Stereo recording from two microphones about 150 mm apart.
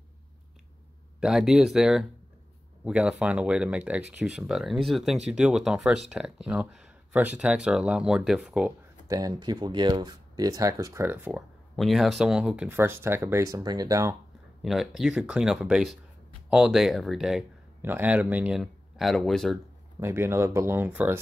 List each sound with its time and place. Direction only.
1.2 s speech: 5° right (ahead or behind)
9.0 s speech: 25° right (ahead or behind)
11.7 s speech: centre (ahead or behind); by 14.1 s 25° right (ahead or behind)
14.6 s speech: centre (ahead or behind)
20.0 s speech: 15° right (ahead or behind)